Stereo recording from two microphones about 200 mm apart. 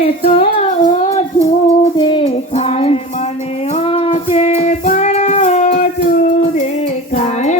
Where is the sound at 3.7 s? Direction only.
30° left (ahead or behind).